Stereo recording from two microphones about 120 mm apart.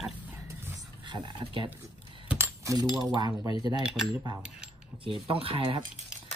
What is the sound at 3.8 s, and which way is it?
Speech, 5° right (ahead or behind).